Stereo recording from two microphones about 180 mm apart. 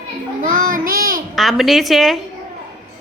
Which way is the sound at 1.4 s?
Centre (ahead or behind).